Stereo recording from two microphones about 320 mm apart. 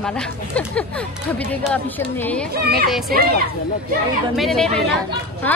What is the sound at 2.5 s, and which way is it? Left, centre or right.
Speech, right.